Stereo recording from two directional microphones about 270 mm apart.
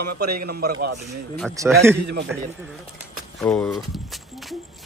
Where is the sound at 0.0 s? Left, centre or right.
Right.